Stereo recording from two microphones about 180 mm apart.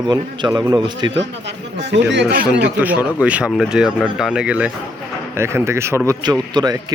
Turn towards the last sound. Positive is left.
turn(degrees=-20)  # may be behind; listen again after turning